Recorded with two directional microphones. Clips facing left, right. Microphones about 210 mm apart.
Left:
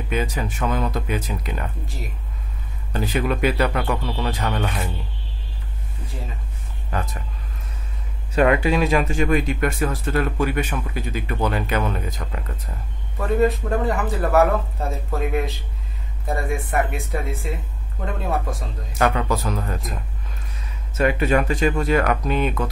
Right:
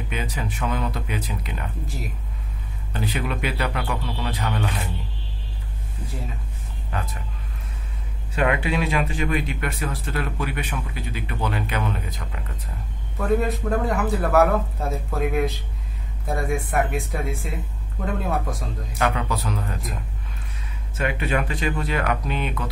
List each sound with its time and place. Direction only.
0.1 s speech: 45° left (ahead or behind)
2.9 s speech: 45° left (ahead or behind)
8.4 s speech: 40° left (ahead or behind)
13.2 s a man's voice: centre (ahead or behind)
18.9 s speech: 45° left (ahead or behind)
21.0 s speech: 40° left (ahead or behind)